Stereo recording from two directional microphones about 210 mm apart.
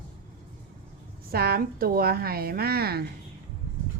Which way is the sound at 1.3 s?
45° right (ahead or behind).